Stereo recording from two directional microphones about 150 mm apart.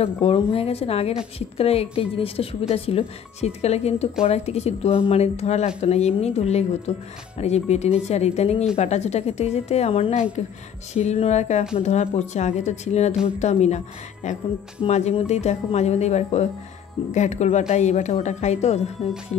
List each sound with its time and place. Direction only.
0.0 s a woman's voice: 40° left (ahead or behind)
13.1 s speech: 5° right (ahead or behind)
13.4 s speech: 50° left (ahead or behind)